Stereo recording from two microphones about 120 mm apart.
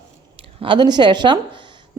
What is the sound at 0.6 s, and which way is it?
Speech, 40° right (ahead or behind).